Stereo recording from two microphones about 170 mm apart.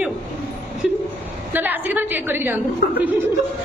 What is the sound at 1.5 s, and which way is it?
A woman's voice, 10° right (ahead or behind).